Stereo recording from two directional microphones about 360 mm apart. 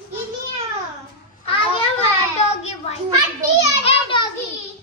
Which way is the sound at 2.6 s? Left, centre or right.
Centre.